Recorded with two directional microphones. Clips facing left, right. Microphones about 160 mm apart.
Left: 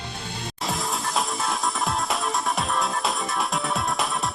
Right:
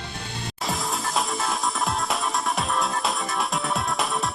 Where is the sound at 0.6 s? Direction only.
Centre (ahead or behind).